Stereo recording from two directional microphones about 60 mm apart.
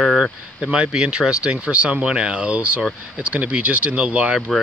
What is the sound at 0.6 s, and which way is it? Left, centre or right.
Speech, centre.